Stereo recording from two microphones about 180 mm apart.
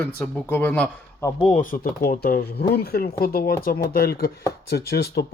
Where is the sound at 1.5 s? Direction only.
50° left (ahead or behind).